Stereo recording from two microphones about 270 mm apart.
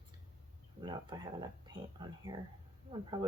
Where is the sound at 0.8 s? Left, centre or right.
Centre.